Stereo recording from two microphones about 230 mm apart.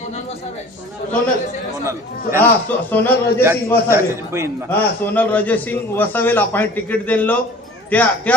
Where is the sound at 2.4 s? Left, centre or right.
Centre.